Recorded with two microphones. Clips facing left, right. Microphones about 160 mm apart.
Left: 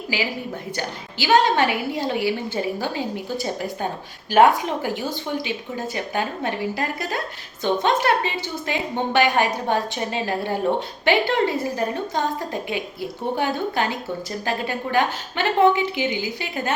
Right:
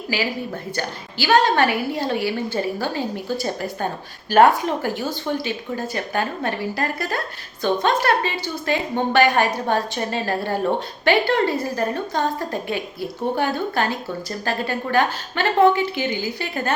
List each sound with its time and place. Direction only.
0.8 s a woman's voice: 15° left (ahead or behind)